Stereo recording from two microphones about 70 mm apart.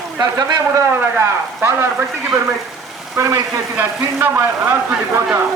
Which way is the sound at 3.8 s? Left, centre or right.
Right.